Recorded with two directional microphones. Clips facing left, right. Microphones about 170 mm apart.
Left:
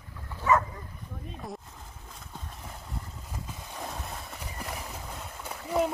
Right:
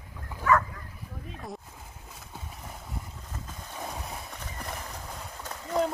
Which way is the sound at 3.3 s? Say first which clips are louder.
Left 1 dB; 10° left (ahead or behind).